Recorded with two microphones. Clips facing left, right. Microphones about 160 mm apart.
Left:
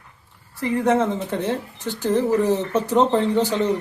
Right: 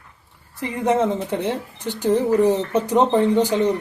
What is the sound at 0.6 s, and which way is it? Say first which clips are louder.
Speech: even; 15° right (ahead or behind).